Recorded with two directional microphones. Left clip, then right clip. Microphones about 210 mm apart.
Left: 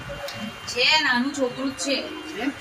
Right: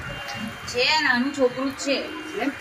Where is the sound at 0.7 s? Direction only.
50° right (ahead or behind).